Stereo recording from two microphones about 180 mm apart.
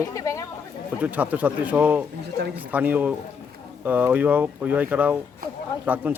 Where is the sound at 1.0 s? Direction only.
10° right (ahead or behind).